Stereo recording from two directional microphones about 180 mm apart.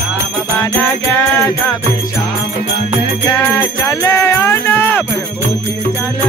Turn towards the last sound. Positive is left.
turn(degrees=10)  # may be behind; listen again after turning